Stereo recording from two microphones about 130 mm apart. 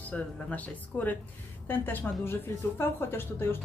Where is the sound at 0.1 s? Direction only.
10° left (ahead or behind).